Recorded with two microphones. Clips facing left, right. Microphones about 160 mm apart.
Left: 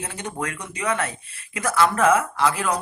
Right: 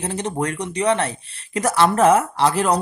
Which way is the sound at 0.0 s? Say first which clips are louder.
Right 6 dB; 35° right (ahead or behind).